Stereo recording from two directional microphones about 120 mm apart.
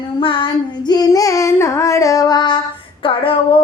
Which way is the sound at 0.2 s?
45° left (ahead or behind).